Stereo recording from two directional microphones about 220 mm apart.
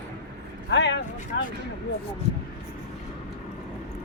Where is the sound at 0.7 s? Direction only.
55° left (ahead or behind).